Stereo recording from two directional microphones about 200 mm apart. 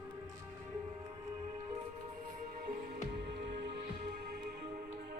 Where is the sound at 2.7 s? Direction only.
50° right (ahead or behind).